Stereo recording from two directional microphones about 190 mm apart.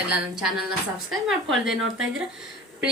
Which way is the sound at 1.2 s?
Centre (ahead or behind).